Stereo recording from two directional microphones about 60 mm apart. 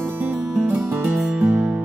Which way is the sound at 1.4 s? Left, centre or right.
Centre.